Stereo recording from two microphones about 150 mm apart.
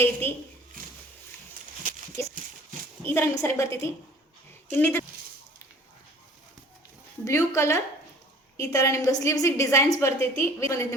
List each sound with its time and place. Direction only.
0.0 s a woman's voice: 15° left (ahead or behind)
1.8 s a sound: 65° right (ahead or behind)
3.0 s a woman's voice: 15° left (ahead or behind)
4.8 s a woman's voice: 15° left (ahead or behind)
7.3 s a woman's voice: 20° left (ahead or behind)